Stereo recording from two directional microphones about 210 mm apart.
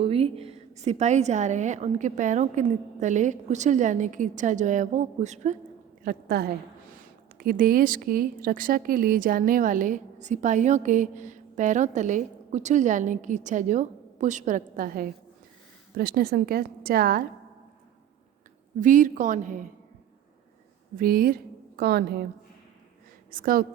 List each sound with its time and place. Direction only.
0.0 s speech: 25° right (ahead or behind)
6.0 s a woman's voice: 45° right (ahead or behind)
18.8 s speech: 35° right (ahead or behind)
20.9 s a woman's voice: 45° right (ahead or behind)
23.3 s a woman's voice: 40° right (ahead or behind)